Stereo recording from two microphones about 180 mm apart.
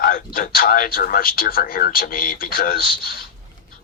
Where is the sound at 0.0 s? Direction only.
55° left (ahead or behind).